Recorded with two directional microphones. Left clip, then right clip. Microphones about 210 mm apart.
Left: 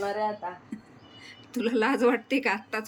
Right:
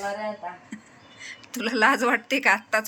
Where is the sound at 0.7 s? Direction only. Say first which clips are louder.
Right 1 dB; 5° left (ahead or behind).